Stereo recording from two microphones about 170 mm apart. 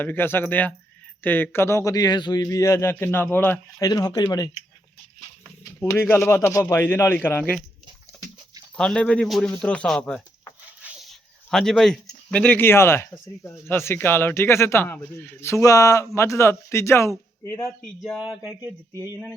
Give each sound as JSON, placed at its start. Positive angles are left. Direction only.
{"t": 0.0, "sound": "a man's voice", "side_deg": 10}
{"t": 5.6, "sound": "a man's voice", "side_deg": 15}
{"t": 8.7, "sound": "speech", "side_deg": 5}
{"t": 10.8, "sound": "a sound", "side_deg": -10}
{"t": 11.5, "sound": "a man's voice", "side_deg": 0}
{"t": 18.0, "sound": "speech", "side_deg": 0}